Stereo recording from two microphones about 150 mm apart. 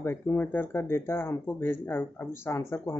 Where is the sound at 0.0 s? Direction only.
15° left (ahead or behind).